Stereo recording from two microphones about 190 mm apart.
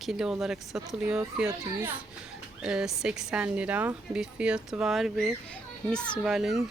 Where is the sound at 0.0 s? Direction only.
Centre (ahead or behind).